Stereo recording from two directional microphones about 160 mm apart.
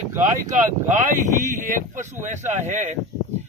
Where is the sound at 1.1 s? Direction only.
55° right (ahead or behind).